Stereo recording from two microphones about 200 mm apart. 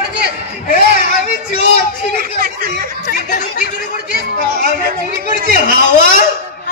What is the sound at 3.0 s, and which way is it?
Chatter, 45° left (ahead or behind).